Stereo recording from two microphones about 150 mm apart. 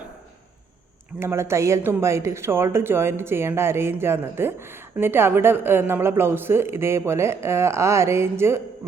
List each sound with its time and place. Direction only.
1.2 s a woman's voice: 15° right (ahead or behind)